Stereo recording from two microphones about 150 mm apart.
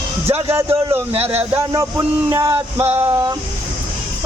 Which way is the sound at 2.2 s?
15° right (ahead or behind).